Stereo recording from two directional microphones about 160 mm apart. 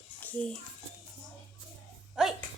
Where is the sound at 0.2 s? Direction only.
10° left (ahead or behind).